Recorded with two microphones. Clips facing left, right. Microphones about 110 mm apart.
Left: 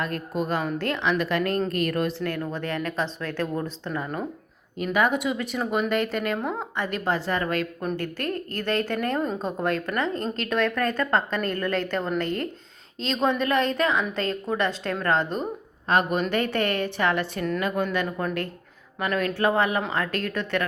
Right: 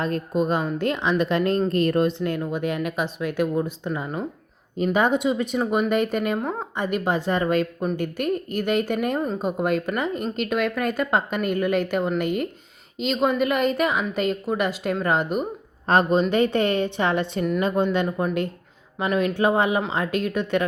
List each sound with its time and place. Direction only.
0.0 s a woman's voice: 20° right (ahead or behind)
15.9 s speech: 35° right (ahead or behind)
16.3 s a woman's voice: 20° right (ahead or behind)